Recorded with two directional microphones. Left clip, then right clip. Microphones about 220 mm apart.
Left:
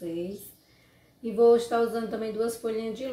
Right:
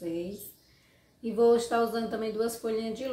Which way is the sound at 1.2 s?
10° right (ahead or behind).